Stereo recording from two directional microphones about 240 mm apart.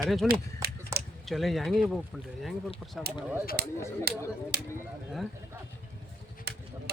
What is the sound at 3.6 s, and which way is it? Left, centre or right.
Speech, right.